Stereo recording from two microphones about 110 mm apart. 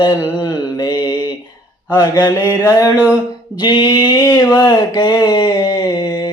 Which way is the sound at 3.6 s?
50° left (ahead or behind).